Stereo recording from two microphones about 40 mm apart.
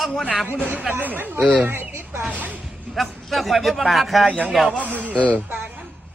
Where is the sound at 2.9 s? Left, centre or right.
Centre.